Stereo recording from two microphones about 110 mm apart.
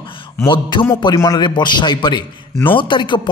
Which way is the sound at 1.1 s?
30° left (ahead or behind).